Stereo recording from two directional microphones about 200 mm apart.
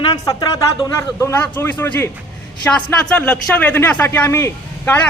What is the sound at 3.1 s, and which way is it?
A man's voice, 5° left (ahead or behind).